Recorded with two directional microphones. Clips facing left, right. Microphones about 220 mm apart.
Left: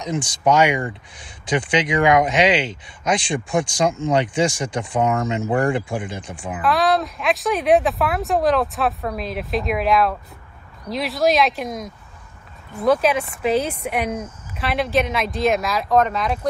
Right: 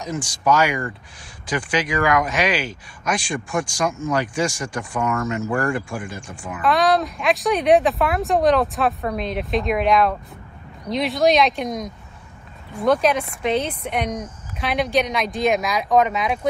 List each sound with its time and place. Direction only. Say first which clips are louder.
0.0 s speech: left 3 dB; 20° left (ahead or behind)
6.6 s speech: right 1 dB; centre (ahead or behind)